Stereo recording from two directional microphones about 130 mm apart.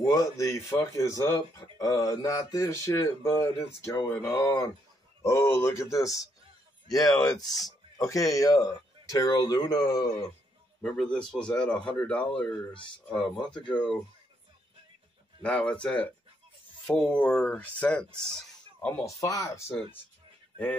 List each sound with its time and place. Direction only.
0.0 s speech: 25° left (ahead or behind)
10.8 s speech: 5° left (ahead or behind)
15.4 s speech: 10° left (ahead or behind)
19.0 s speech: 25° left (ahead or behind)